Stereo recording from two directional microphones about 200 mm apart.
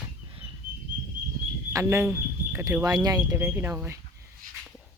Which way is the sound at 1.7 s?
15° right (ahead or behind).